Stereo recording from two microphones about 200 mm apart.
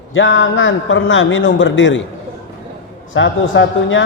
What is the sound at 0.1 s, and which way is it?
A man's voice, 75° left (ahead or behind).